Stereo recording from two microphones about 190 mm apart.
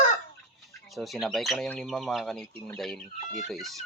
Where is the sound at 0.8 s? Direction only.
Centre (ahead or behind).